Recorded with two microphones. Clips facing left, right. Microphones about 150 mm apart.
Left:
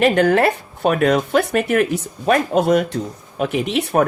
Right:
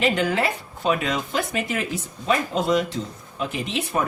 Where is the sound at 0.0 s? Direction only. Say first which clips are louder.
Left 8 dB; 60° left (ahead or behind).